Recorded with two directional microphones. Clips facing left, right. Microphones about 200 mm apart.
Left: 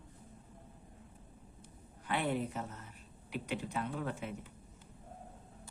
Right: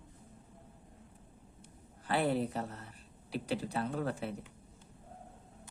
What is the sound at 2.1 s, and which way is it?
Speech, 35° right (ahead or behind).